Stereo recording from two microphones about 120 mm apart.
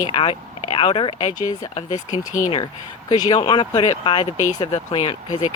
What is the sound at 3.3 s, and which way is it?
Speech, 40° left (ahead or behind).